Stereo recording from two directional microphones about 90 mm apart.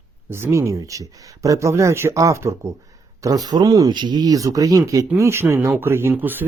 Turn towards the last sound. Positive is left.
turn(degrees=-20)  # may be behind; listen again after turning